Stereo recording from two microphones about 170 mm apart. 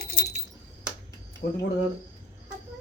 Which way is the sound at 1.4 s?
50° left (ahead or behind).